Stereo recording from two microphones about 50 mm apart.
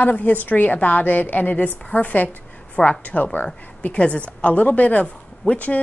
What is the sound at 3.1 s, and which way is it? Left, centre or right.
A woman's voice, left.